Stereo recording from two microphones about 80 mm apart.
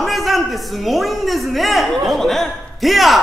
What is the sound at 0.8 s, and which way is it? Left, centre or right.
Speech, centre.